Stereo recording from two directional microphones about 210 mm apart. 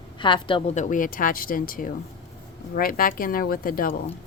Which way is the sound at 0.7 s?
35° left (ahead or behind).